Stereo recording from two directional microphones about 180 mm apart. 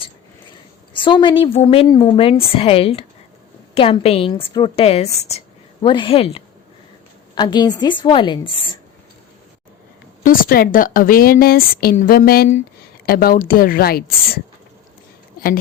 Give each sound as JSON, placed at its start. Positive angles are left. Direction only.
{"t": 0.9, "sound": "a woman's voice", "side_deg": 25}
{"t": 10.2, "sound": "a woman's voice", "side_deg": 50}